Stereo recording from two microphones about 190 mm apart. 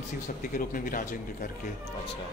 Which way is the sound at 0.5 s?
45° left (ahead or behind).